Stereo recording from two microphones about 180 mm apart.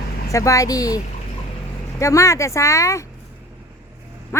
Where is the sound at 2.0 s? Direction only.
15° left (ahead or behind).